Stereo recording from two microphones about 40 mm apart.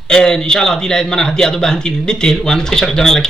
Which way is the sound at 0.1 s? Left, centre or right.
Centre.